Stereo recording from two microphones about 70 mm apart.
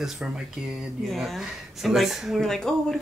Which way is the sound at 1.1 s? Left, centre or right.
Centre.